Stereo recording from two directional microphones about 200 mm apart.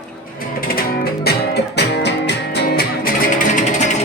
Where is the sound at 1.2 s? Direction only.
55° left (ahead or behind).